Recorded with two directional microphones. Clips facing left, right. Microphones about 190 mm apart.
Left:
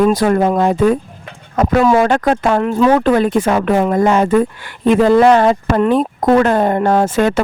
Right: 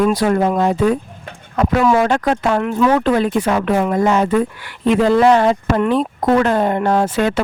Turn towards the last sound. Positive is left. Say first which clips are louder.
# left 3 dB
turn(degrees=45)  # may be behind; listen again after turning